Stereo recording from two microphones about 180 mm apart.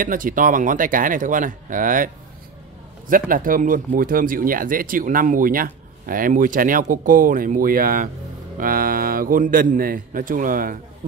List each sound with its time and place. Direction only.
0.0 s speech: 50° right (ahead or behind)
3.1 s speech: 50° right (ahead or behind)